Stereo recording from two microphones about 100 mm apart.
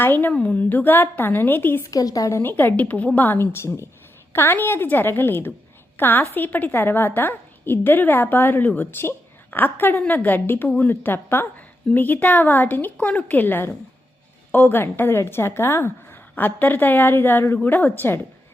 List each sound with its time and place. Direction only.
0.0 s a woman's voice: 20° left (ahead or behind)
1.9 s speech: 35° left (ahead or behind)
2.4 s a woman's voice: 20° left (ahead or behind)